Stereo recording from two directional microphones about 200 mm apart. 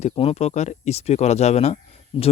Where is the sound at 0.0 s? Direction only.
30° left (ahead or behind).